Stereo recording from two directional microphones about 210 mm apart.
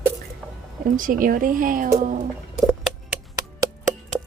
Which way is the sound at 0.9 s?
40° right (ahead or behind).